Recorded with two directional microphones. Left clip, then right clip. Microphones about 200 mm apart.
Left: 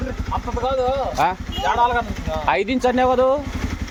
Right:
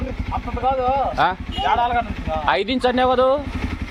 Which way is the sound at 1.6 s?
50° left (ahead or behind).